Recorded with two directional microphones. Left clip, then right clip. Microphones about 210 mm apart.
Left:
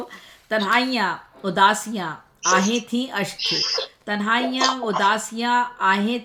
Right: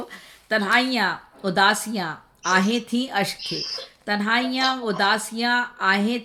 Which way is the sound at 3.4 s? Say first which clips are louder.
Left 7 dB; 40° left (ahead or behind).